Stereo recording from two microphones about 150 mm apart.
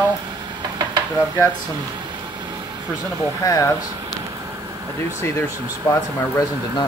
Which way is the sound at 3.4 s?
20° left (ahead or behind).